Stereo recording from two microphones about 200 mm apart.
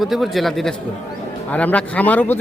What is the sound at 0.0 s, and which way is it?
A man's voice, centre (ahead or behind).